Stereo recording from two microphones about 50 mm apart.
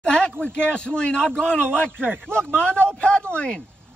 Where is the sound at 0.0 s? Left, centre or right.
Centre.